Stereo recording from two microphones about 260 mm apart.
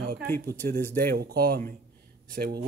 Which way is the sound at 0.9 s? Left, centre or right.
Right.